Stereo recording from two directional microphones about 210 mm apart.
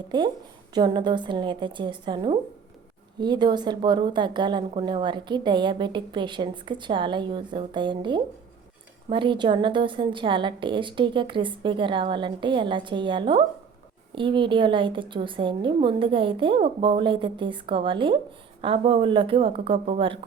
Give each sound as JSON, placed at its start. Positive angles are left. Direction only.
{"t": 0.1, "sound": "a woman's voice", "side_deg": -20}